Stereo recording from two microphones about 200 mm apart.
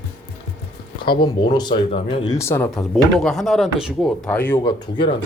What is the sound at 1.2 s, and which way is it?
Speech, 20° left (ahead or behind).